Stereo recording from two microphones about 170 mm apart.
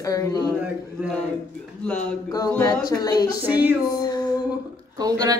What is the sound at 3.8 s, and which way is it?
Music, 20° left (ahead or behind).